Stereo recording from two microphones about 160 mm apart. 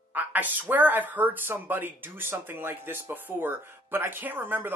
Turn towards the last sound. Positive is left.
turn(degrees=-10)  # may be behind; listen again after turning